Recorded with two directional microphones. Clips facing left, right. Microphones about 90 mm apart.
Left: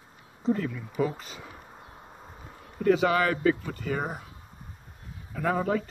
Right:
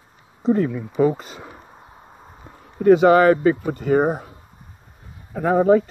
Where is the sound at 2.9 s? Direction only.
35° right (ahead or behind).